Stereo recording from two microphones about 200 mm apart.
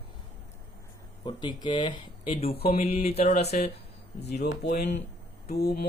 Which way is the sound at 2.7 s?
30° left (ahead or behind).